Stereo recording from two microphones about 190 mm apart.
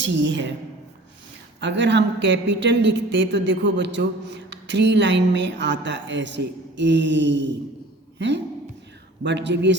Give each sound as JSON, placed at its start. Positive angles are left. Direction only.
{"t": 0.0, "sound": "a woman's voice", "side_deg": -70}
{"t": 1.6, "sound": "a woman's voice", "side_deg": -70}
{"t": 9.2, "sound": "a woman's voice", "side_deg": -70}